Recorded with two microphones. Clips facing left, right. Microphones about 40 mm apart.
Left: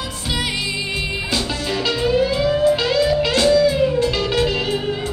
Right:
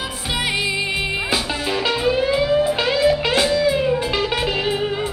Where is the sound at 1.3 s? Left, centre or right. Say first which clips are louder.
Right 1 dB; centre.